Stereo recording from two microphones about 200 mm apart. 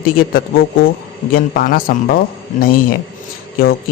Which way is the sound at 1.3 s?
45° left (ahead or behind).